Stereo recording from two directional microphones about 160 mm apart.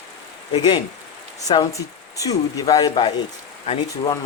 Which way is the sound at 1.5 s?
30° left (ahead or behind).